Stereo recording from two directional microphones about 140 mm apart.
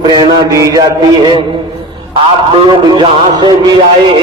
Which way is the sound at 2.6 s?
35° right (ahead or behind).